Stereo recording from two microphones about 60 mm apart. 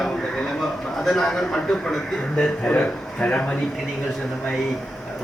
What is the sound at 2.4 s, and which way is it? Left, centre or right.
Speech, left.